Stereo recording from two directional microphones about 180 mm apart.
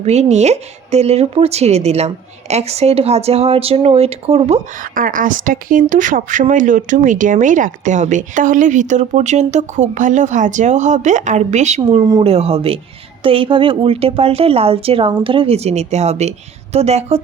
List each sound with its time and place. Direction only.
0.0 s speech: 40° right (ahead or behind)
11.8 s speech: 25° right (ahead or behind)